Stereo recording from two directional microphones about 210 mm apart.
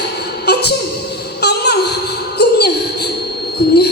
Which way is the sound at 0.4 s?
50° left (ahead or behind).